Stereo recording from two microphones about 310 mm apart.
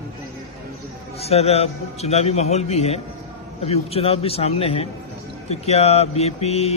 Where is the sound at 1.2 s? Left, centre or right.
Centre.